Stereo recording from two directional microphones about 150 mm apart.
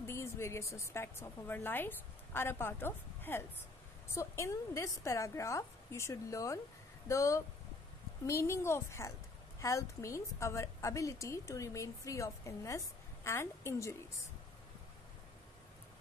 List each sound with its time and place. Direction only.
0.0 s a woman's voice: 15° left (ahead or behind)